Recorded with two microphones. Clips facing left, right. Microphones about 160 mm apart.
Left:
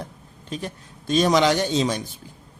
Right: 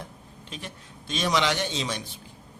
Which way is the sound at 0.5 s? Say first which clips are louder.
Left 9 dB; 40° left (ahead or behind).